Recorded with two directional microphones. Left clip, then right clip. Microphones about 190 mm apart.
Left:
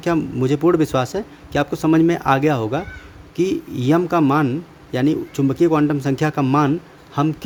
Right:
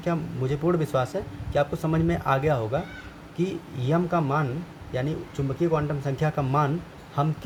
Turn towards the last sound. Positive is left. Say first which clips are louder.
# left 7 dB
turn(degrees=45)  # may be behind; listen again after turning